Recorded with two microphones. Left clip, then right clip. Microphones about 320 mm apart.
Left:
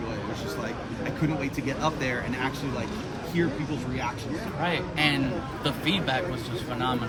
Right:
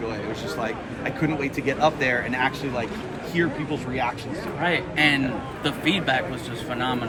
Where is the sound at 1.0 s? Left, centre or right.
Centre.